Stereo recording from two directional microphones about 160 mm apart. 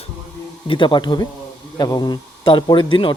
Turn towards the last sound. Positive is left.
turn(degrees=30)  # may be behind; listen again after turning